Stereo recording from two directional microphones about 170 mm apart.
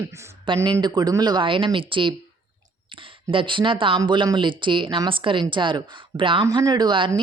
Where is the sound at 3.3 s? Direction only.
30° right (ahead or behind).